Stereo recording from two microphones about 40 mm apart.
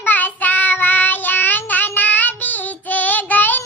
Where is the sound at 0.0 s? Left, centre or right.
Left.